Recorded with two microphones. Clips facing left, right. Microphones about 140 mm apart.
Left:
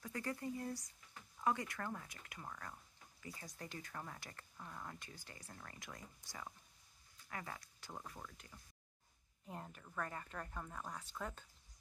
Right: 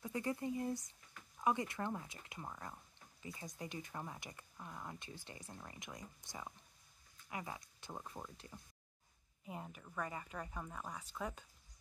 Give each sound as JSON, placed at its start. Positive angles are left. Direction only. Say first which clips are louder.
{"t": 0.0, "sound": "speech", "louder": "right 4 dB", "side_deg": -20}
{"t": 9.4, "sound": "speech", "louder": "right 2 dB", "side_deg": -5}